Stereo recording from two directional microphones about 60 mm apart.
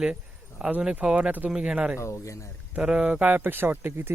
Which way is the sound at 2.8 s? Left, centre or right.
Centre.